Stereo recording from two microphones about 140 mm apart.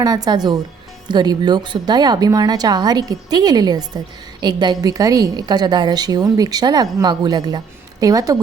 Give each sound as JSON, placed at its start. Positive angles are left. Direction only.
{"t": 0.0, "sound": "a woman's voice", "side_deg": -25}